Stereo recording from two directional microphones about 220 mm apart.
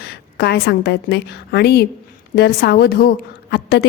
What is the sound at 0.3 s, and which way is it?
A woman's voice, 45° left (ahead or behind).